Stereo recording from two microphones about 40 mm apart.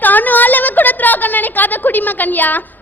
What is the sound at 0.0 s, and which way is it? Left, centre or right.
A woman's voice, left.